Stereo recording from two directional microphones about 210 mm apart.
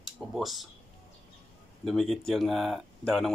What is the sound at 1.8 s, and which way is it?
Speech, centre (ahead or behind).